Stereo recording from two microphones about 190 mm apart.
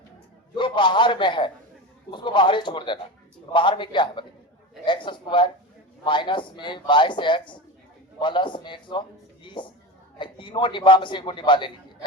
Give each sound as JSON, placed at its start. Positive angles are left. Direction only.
{"t": 0.5, "sound": "a man's voice", "side_deg": 25}